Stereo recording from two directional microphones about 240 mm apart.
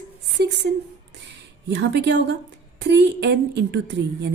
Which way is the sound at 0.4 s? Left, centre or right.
Right.